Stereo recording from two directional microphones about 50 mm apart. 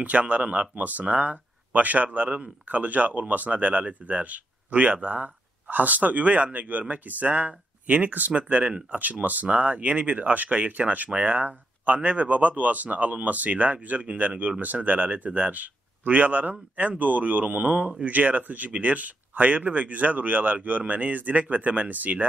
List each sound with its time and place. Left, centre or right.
0.0 s speech: right